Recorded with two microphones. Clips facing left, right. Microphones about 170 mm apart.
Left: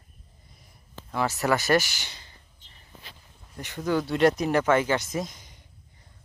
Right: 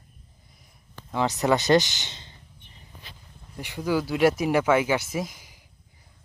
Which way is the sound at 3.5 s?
10° right (ahead or behind).